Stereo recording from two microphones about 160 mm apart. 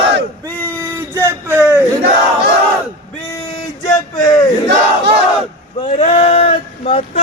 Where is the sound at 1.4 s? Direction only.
10° right (ahead or behind).